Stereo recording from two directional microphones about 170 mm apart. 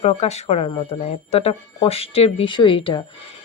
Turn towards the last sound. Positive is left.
turn(degrees=30)  # may be behind; listen again after turning